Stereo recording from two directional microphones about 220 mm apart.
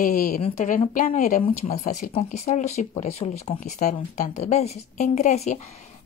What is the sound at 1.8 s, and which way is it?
Speech, 40° left (ahead or behind).